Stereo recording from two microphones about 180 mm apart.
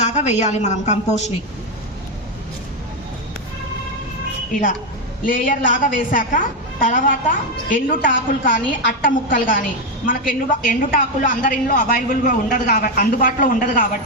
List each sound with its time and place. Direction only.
0.0 s a woman's voice: 40° left (ahead or behind)
5.2 s a woman's voice: 50° left (ahead or behind)